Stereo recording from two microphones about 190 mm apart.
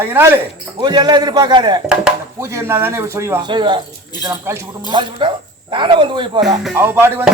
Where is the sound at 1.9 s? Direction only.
10° right (ahead or behind).